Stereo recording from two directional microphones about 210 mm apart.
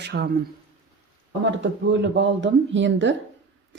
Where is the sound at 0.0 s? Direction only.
55° right (ahead or behind).